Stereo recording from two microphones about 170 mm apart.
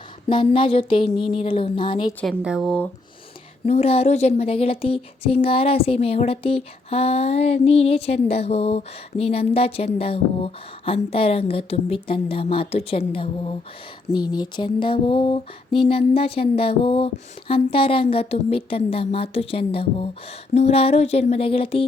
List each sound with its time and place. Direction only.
0.3 s speech: 30° left (ahead or behind)
2.2 s speech: 5° right (ahead or behind)
3.7 s speech: 35° left (ahead or behind)